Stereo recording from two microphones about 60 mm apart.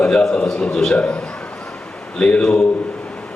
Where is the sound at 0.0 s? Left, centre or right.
Centre.